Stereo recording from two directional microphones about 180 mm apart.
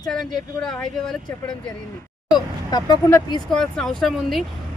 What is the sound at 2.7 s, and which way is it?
Speech, 20° left (ahead or behind).